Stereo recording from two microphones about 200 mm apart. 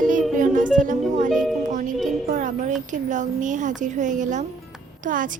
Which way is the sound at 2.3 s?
40° right (ahead or behind).